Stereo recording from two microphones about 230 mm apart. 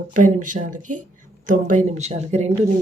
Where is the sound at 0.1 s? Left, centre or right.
Right.